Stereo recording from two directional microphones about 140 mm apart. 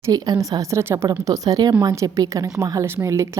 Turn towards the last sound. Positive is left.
turn(degrees=-20)  # may be behind; listen again after turning